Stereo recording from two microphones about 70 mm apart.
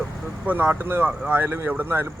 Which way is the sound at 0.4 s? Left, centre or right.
Right.